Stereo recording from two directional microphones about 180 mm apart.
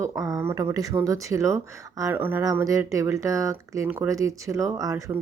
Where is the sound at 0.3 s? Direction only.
15° right (ahead or behind).